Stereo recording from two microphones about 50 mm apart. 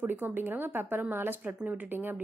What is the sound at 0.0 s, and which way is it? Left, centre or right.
A woman's voice, right.